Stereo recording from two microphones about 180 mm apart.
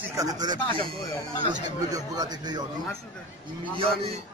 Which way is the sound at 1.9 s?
20° right (ahead or behind).